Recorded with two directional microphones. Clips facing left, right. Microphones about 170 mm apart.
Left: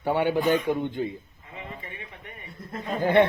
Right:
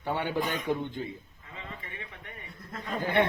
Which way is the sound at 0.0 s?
40° left (ahead or behind).